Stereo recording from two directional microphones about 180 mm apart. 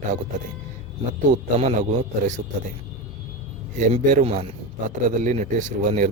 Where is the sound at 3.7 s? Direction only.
45° right (ahead or behind).